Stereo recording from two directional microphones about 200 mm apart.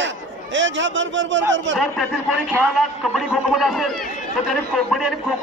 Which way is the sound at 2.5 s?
Centre (ahead or behind).